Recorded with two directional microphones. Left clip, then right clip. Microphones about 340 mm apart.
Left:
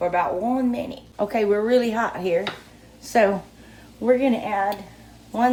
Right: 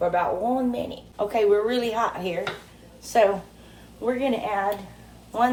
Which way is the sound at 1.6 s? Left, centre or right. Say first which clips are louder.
Left 4 dB; left.